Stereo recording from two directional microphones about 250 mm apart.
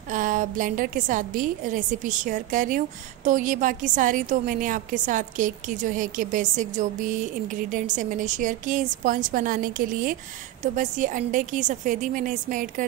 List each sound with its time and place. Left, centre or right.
0.1 s a woman's voice: right